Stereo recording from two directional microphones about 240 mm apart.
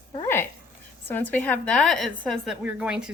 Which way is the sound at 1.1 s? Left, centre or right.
Centre.